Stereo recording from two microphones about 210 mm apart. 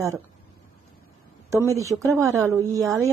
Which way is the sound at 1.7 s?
15° right (ahead or behind).